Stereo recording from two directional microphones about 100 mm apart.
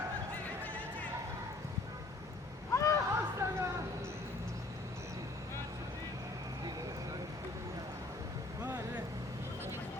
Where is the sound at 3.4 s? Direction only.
25° right (ahead or behind).